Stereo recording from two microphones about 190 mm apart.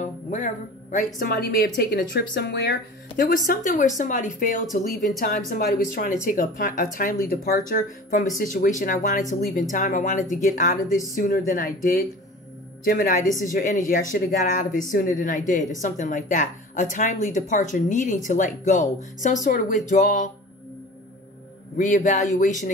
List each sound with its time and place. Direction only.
0.0 s music: 40° left (ahead or behind)
0.9 s a woman's voice: 50° left (ahead or behind)
21.7 s speech: 40° left (ahead or behind)